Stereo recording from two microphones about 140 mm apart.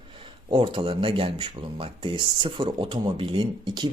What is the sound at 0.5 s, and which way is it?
Speech, 35° right (ahead or behind).